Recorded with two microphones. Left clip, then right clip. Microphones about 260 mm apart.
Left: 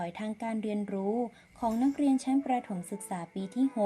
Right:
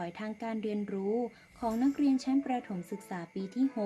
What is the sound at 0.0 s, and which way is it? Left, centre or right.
Speech, centre.